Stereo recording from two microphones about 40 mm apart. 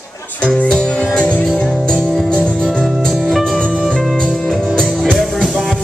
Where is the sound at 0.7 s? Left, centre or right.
Centre.